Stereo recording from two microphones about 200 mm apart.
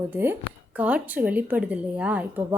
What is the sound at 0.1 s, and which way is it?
Speech, 10° right (ahead or behind).